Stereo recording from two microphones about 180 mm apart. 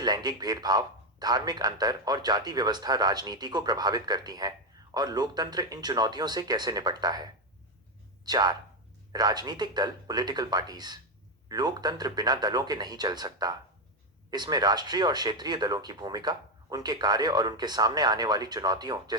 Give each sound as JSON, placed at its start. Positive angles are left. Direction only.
{"t": 0.0, "sound": "speech", "side_deg": -20}
{"t": 8.2, "sound": "speech", "side_deg": -20}